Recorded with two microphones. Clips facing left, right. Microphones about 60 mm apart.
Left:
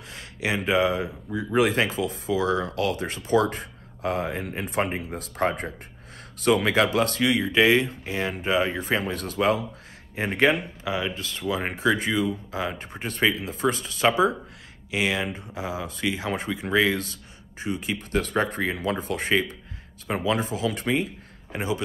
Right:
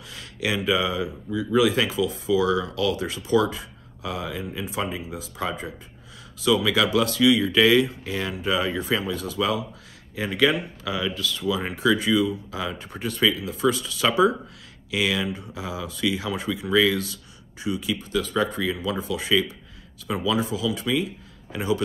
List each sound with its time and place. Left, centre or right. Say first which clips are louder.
0.1 s a sound: right 1 dB; left
0.6 s speech: left 2 dB; left
9.0 s a man's voice: left 2 dB; left